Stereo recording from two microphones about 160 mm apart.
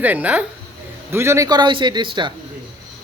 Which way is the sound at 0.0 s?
10° right (ahead or behind).